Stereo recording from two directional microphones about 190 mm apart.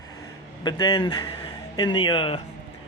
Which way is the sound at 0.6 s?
20° left (ahead or behind).